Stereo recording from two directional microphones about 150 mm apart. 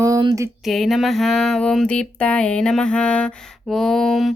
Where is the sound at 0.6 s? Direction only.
Centre (ahead or behind).